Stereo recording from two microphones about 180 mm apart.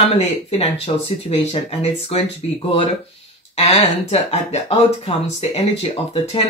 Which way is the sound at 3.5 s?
35° left (ahead or behind).